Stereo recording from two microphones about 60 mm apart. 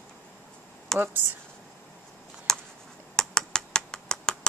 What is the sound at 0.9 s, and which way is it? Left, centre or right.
Speech, right.